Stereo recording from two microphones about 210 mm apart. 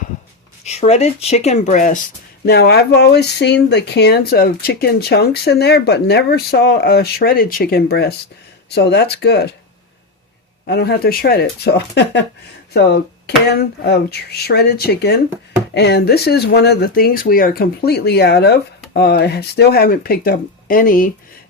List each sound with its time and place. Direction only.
0.6 s speech: 30° left (ahead or behind)
2.5 s speech: 50° left (ahead or behind)
10.7 s speech: 50° left (ahead or behind)